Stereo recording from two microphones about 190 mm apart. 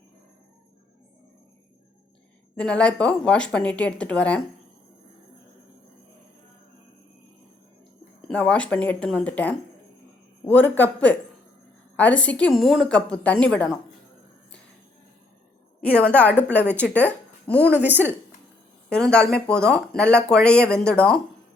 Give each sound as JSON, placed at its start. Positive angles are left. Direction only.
{"t": 2.6, "sound": "speech", "side_deg": 5}
{"t": 8.3, "sound": "a woman's voice", "side_deg": 5}
{"t": 15.8, "sound": "a woman's voice", "side_deg": 5}
{"t": 17.7, "sound": "speech", "side_deg": -10}
{"t": 18.9, "sound": "speech", "side_deg": 5}